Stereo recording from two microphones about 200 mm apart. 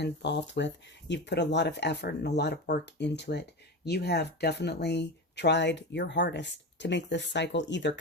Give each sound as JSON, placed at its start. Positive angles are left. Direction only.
{"t": 0.0, "sound": "speech", "side_deg": 60}